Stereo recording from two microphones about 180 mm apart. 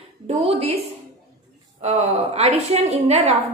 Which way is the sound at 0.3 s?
35° right (ahead or behind).